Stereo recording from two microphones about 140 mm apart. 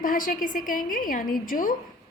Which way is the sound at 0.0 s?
80° left.